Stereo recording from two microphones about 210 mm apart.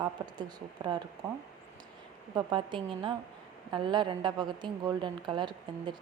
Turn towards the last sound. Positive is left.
turn(degrees=-20)  # may be behind; listen again after turning